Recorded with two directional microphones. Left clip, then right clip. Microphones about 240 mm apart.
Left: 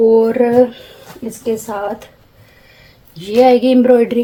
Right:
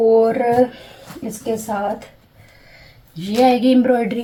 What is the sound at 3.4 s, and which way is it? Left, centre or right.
Speech, left.